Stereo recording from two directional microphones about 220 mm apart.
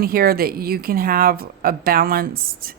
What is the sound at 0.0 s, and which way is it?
A woman's voice, 40° right (ahead or behind).